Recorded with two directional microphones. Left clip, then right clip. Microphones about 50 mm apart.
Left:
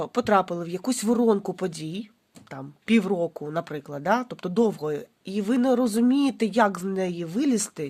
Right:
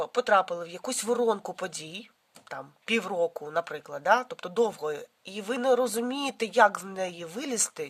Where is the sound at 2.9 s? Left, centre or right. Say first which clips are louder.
Left 3 dB; centre.